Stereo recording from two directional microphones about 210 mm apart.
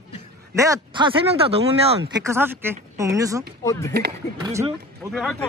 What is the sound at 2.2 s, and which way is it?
Speech, 10° right (ahead or behind).